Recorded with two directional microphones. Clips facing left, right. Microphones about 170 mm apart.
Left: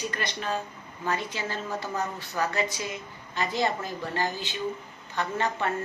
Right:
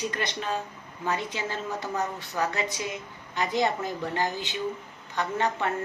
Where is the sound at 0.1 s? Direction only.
20° right (ahead or behind).